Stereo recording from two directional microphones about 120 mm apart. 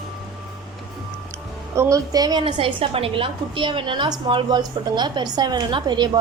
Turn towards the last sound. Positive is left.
turn(degrees=-40)  # may be behind; listen again after turning